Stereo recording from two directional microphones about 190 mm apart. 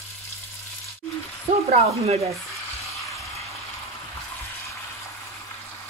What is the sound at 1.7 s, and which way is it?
Speech, 35° right (ahead or behind).